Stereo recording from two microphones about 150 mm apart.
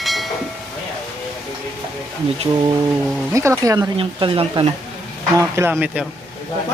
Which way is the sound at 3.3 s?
20° right (ahead or behind).